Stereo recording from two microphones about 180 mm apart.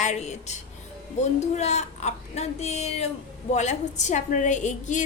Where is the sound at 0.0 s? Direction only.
40° left (ahead or behind).